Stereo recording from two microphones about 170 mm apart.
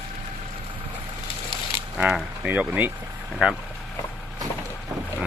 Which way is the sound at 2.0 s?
Centre (ahead or behind).